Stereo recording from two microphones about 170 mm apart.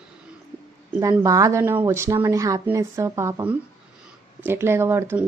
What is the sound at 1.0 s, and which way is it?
Speech, 20° right (ahead or behind).